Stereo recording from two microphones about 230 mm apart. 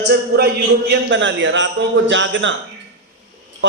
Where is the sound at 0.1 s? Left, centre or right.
Right.